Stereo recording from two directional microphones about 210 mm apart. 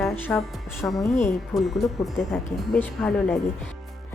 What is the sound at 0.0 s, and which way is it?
Speech, 10° left (ahead or behind).